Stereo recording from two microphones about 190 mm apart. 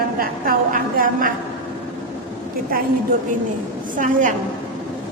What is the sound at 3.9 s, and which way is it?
Speech, 40° right (ahead or behind).